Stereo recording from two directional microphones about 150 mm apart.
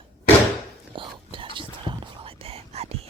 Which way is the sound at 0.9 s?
35° right (ahead or behind).